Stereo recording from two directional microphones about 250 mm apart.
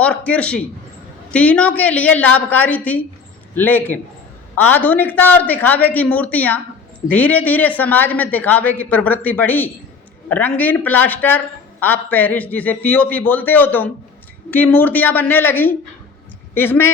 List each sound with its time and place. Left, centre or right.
0.0 s a woman's voice: centre